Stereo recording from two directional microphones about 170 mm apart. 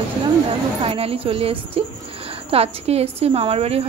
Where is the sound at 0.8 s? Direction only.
35° right (ahead or behind).